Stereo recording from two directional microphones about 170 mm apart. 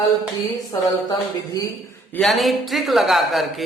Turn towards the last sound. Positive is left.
turn(degrees=0)  # may be behind; listen again after turning